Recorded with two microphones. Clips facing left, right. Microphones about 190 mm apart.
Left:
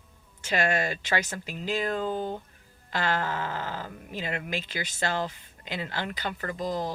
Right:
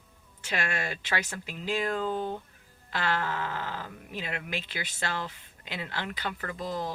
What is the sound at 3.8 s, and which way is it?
Speech, 40° left (ahead or behind).